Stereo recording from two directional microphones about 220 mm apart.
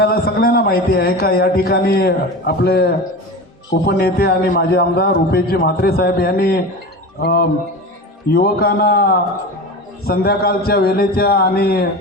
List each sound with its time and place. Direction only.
0.0 s a man's voice: 45° left (ahead or behind)